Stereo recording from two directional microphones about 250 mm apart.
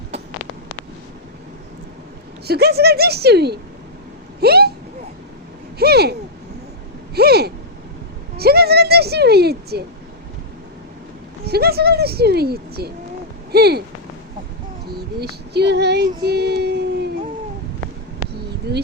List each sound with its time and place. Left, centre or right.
2.5 s speech: right
5.8 s speech: right
7.2 s speech: right
11.4 s speech: right
15.2 s child singing: right